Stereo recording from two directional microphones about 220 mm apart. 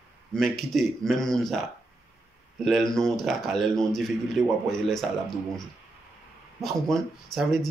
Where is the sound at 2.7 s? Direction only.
Centre (ahead or behind).